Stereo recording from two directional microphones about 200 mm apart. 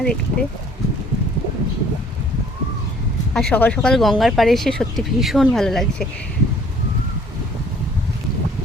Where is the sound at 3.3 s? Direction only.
5° left (ahead or behind).